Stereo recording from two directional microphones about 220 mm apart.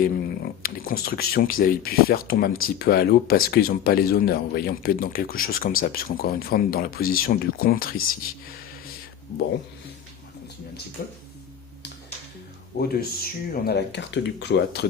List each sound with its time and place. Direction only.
0.6 s speech: 40° left (ahead or behind)
11.0 s speech: 40° left (ahead or behind)
12.8 s speech: 45° left (ahead or behind)